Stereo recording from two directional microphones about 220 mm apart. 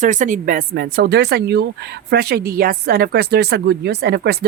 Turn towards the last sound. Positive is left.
turn(degrees=-50)  # may be behind; listen again after turning